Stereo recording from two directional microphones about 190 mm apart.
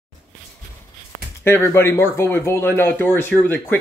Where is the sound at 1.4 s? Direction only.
10° left (ahead or behind).